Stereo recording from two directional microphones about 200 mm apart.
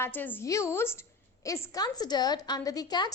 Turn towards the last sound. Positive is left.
turn(degrees=20)  # may be behind; listen again after turning